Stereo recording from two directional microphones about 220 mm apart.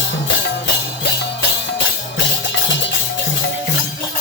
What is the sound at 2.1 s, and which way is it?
Music, 55° left (ahead or behind).